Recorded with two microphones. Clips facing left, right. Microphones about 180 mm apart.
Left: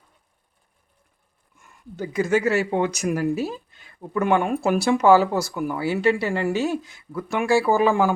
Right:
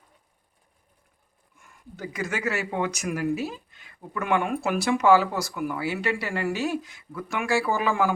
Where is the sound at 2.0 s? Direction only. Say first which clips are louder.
Left 9 dB; 25° left (ahead or behind).